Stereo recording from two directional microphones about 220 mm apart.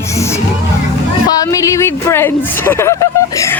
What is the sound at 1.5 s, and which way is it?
Speech, 15° left (ahead or behind).